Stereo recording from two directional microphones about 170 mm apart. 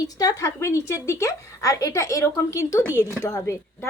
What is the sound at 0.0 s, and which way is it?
A woman's voice, 20° left (ahead or behind).